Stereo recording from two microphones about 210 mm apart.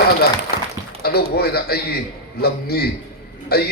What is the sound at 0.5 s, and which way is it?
Applause, 45° left (ahead or behind).